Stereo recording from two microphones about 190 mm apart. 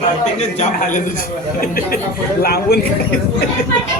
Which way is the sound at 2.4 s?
55° left (ahead or behind).